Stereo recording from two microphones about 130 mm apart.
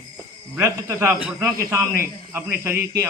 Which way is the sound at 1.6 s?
20° right (ahead or behind).